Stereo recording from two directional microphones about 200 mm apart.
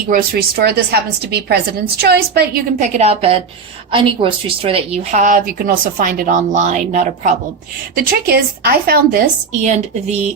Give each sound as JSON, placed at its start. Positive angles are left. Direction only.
{"t": 0.1, "sound": "a woman's voice", "side_deg": -50}
{"t": 7.9, "sound": "a woman's voice", "side_deg": -50}